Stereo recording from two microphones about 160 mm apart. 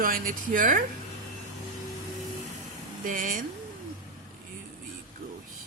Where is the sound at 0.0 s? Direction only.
60° right (ahead or behind).